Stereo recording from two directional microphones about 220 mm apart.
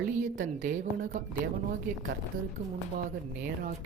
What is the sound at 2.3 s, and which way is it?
Speech, 65° right (ahead or behind).